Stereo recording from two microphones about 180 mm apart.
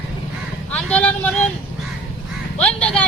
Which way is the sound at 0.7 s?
5° left (ahead or behind).